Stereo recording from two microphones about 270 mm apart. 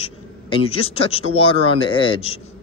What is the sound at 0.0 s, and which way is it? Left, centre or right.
Speech, left.